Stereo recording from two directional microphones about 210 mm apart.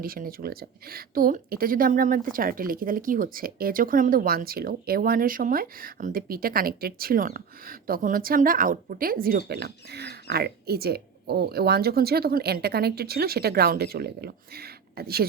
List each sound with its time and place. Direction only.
0.0 s a woman's voice: 45° right (ahead or behind)